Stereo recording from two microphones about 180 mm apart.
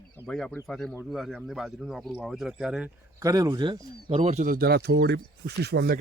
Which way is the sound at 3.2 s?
20° right (ahead or behind).